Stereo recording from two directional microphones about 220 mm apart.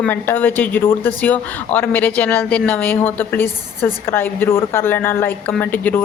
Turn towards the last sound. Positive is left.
turn(degrees=10)  # may be behind; listen again after turning